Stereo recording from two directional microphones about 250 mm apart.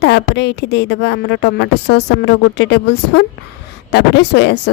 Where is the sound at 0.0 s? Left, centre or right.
Left.